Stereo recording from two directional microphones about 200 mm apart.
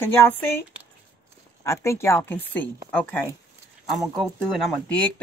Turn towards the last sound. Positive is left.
turn(degrees=5)  # may be behind; listen again after turning